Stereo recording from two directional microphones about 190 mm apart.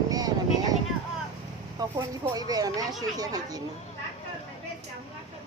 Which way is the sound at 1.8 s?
20° right (ahead or behind).